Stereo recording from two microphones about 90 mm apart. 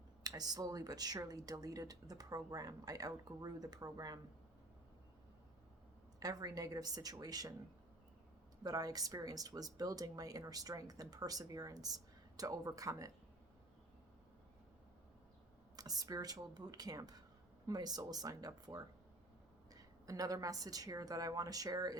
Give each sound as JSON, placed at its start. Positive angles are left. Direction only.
{"t": 0.2, "sound": "speech", "side_deg": -45}
{"t": 6.1, "sound": "speech", "side_deg": -45}
{"t": 8.6, "sound": "speech", "side_deg": -45}
{"t": 15.7, "sound": "speech", "side_deg": -45}